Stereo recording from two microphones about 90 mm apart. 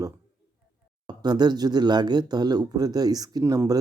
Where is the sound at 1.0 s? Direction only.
50° right (ahead or behind).